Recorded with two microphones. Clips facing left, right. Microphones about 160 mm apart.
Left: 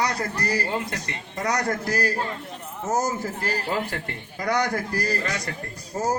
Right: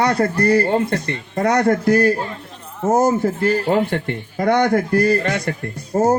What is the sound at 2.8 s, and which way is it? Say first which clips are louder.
A man's voice: right 10 dB; 55° right (ahead or behind).